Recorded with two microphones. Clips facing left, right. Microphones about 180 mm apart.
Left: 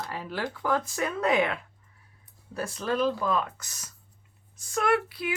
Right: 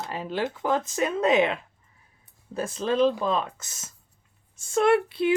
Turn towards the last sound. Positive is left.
turn(degrees=-25)  # may be behind; listen again after turning